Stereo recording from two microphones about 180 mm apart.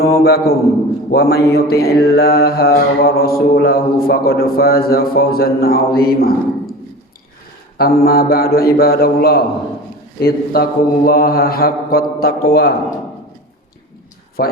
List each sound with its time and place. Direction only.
0.2 s mantra: 60° left (ahead or behind)
7.8 s mantra: 60° left (ahead or behind)
14.4 s mantra: 55° left (ahead or behind)